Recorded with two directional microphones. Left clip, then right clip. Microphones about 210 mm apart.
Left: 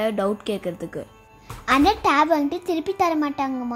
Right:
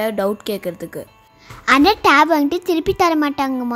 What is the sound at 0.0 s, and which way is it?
A child's voice, 15° right (ahead or behind).